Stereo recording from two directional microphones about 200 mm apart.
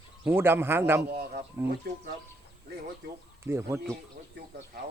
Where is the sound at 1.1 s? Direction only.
50° right (ahead or behind).